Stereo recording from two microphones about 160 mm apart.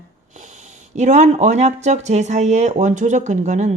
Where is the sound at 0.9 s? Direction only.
45° right (ahead or behind).